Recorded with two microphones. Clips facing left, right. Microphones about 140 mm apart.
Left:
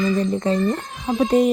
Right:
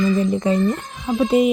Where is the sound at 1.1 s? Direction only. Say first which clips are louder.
Right 1 dB; 5° right (ahead or behind).